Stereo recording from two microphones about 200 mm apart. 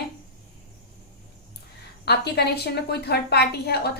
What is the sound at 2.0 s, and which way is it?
A woman's voice, 55° left (ahead or behind).